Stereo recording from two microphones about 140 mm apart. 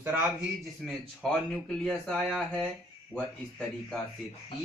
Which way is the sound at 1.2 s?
5° left (ahead or behind).